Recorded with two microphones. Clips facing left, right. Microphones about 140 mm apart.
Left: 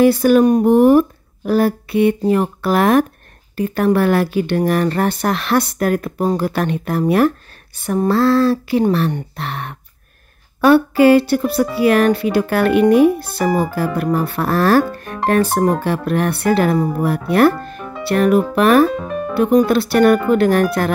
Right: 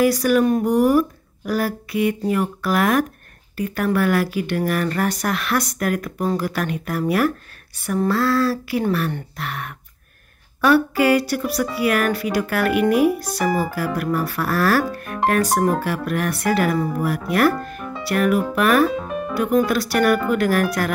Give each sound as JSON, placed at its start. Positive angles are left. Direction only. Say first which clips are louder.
{"t": 0.0, "sound": "speech", "louder": "left 5 dB", "side_deg": 30}
{"t": 18.9, "sound": "speech", "louder": "left 3 dB", "side_deg": 0}
{"t": 19.3, "sound": "speech", "louder": "left 5 dB", "side_deg": 30}